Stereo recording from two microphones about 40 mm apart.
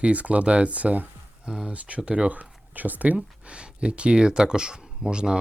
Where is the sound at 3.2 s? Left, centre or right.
Right.